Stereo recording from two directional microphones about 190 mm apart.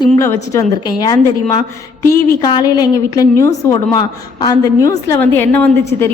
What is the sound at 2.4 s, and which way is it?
A woman's voice, 20° left (ahead or behind).